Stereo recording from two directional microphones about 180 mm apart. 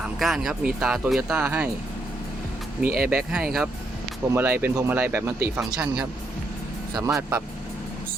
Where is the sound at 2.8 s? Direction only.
55° right (ahead or behind).